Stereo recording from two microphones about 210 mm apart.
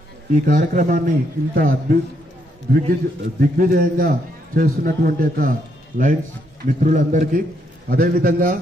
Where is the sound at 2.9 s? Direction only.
45° right (ahead or behind).